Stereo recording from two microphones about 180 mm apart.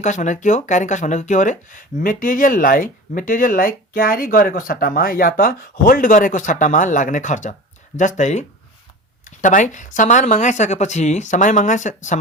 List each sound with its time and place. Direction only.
0.0 s speech: 45° left (ahead or behind)